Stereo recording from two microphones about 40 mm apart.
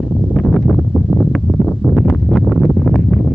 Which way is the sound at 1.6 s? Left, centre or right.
Left.